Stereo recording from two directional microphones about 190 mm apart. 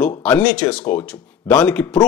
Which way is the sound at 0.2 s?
5° left (ahead or behind).